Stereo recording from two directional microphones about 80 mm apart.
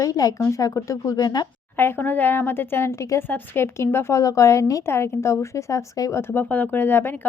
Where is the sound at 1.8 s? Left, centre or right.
Left.